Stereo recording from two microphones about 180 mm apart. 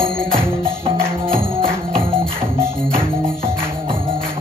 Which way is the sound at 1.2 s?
30° right (ahead or behind).